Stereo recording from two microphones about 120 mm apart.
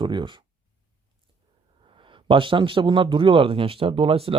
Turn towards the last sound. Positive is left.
turn(degrees=-50)  # may be behind; listen again after turning